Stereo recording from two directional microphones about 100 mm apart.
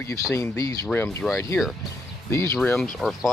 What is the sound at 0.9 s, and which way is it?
Speech, 20° left (ahead or behind).